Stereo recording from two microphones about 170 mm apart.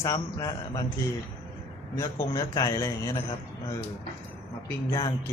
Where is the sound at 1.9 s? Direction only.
20° left (ahead or behind).